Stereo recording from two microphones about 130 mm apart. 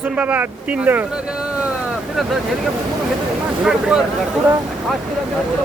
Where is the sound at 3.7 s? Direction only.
5° right (ahead or behind).